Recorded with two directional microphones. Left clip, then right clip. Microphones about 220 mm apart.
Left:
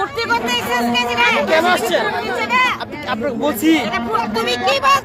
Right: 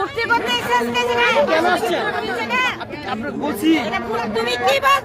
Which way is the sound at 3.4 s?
30° left (ahead or behind).